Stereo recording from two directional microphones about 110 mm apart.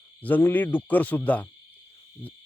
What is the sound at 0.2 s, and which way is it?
A man's voice, 15° left (ahead or behind).